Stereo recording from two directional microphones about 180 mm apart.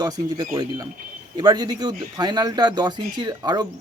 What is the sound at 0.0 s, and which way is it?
A man's voice, 20° right (ahead or behind).